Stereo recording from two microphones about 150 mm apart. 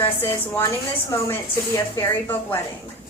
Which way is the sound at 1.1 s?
20° left (ahead or behind).